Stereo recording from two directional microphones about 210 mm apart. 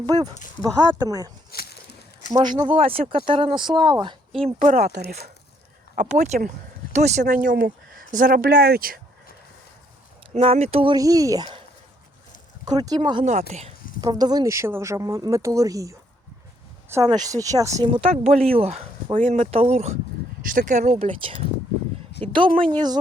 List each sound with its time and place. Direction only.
0.0 s speech: 20° right (ahead or behind)
1.5 s a sound: 50° left (ahead or behind)
2.3 s speech: 20° right (ahead or behind); by 5.3 s 45° right (ahead or behind)
6.0 s speech: 35° right (ahead or behind)
10.3 s speech: 30° right (ahead or behind)
12.6 s speech: 20° right (ahead or behind)
14.0 s speech: 20° right (ahead or behind)
18.0 s speech: 30° right (ahead or behind)